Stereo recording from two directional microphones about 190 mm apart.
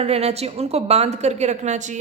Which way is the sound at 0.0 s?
35° right (ahead or behind).